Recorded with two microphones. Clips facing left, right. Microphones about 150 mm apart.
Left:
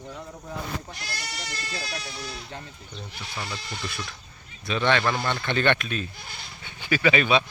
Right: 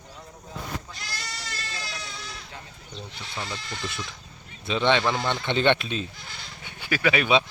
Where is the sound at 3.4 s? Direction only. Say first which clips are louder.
Right 1 dB; 20° right (ahead or behind).